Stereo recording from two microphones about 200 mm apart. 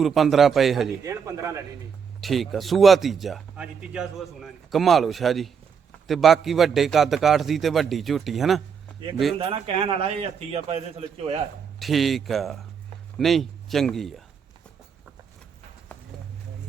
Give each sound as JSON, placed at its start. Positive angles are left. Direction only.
{"t": 0.0, "sound": "a man's voice", "side_deg": 0}
{"t": 1.0, "sound": "speech", "side_deg": -15}
{"t": 2.2, "sound": "a man's voice", "side_deg": 0}
{"t": 9.4, "sound": "a man's voice", "side_deg": -25}
{"t": 11.8, "sound": "a man's voice", "side_deg": 0}
{"t": 15.9, "sound": "run", "side_deg": 10}